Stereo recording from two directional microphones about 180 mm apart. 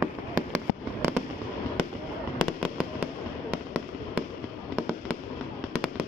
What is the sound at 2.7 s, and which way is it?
Fireworks, 10° right (ahead or behind).